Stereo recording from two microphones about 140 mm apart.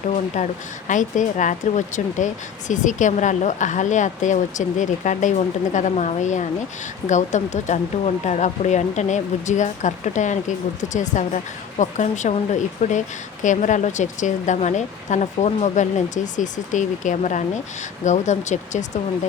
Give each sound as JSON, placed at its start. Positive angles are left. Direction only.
{"t": 0.3, "sound": "speech", "side_deg": 60}